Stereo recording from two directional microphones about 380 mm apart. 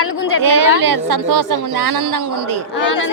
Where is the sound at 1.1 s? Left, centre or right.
Right.